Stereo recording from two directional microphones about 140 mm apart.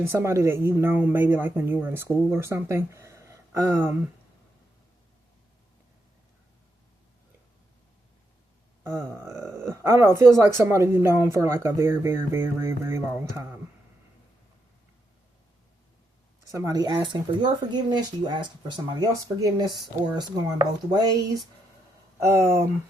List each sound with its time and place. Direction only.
0.0 s a woman's voice: 20° right (ahead or behind)
8.8 s a woman's voice: 15° right (ahead or behind)
16.5 s speech: 20° right (ahead or behind)